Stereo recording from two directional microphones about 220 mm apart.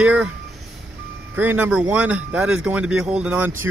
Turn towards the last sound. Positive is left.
turn(degrees=-5)  # may be behind; listen again after turning